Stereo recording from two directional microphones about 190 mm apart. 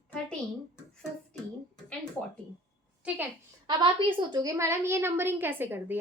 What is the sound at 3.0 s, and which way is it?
Speech, 5° right (ahead or behind).